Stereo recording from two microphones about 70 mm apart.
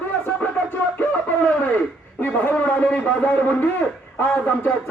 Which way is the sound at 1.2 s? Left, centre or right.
Left.